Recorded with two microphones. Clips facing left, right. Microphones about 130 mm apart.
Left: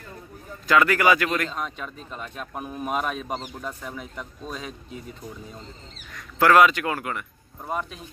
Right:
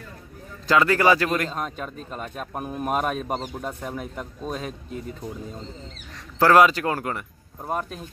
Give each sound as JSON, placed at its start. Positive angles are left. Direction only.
{"t": 0.7, "sound": "speech", "side_deg": -30}
{"t": 1.5, "sound": "speech", "side_deg": -45}
{"t": 6.1, "sound": "speech", "side_deg": -30}